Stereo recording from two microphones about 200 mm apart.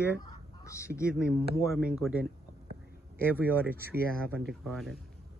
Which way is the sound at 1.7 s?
5° right (ahead or behind).